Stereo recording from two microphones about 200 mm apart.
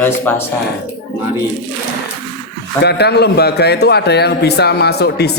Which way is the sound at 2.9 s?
55° left (ahead or behind).